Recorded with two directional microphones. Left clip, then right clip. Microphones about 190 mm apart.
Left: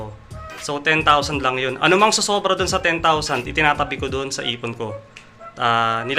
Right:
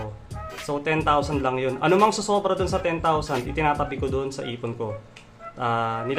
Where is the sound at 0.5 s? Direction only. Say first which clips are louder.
Left 6 dB; centre (ahead or behind).